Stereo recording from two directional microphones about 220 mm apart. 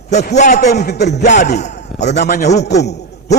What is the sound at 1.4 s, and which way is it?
Speech, 30° left (ahead or behind).